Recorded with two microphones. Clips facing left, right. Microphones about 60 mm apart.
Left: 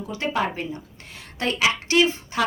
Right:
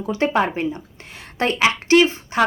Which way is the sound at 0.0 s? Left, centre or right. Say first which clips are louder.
Right 6 dB; right.